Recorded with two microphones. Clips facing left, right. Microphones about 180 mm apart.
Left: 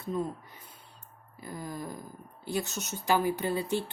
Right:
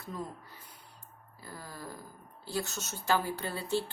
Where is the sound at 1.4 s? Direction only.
20° left (ahead or behind).